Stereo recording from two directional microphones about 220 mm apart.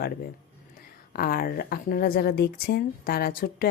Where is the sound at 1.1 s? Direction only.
45° left (ahead or behind).